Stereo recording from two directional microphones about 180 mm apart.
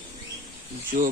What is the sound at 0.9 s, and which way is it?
Speech, 50° right (ahead or behind).